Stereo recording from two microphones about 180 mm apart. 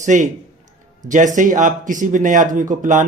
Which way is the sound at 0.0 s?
45° right (ahead or behind).